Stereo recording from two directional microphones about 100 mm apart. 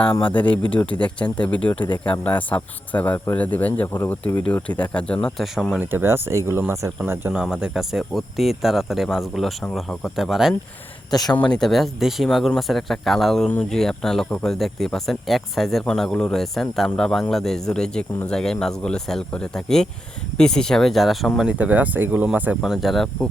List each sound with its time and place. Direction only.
0.3 s speech: 15° left (ahead or behind)
5.8 s speech: 20° right (ahead or behind)
7.3 s speech: 5° right (ahead or behind)
11.1 s speech: 40° left (ahead or behind)
11.5 s speech: 5° left (ahead or behind)
21.6 s speech: 15° right (ahead or behind)
22.6 s speech: centre (ahead or behind)